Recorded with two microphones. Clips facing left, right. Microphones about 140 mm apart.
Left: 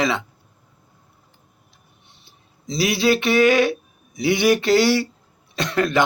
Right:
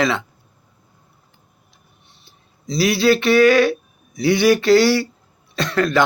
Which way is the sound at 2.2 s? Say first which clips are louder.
Right 1 dB; 20° left (ahead or behind).